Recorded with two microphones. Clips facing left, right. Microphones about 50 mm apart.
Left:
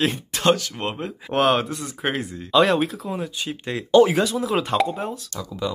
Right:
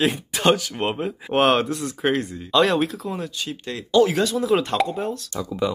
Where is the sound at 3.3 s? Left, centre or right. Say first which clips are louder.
Left 2 dB; centre.